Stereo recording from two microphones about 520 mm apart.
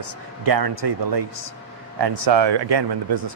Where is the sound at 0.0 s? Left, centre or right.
Right.